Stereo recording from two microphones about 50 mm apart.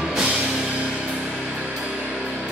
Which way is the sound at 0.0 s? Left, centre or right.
Centre.